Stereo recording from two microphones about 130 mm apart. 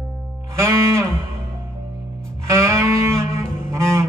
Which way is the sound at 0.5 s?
20° right (ahead or behind).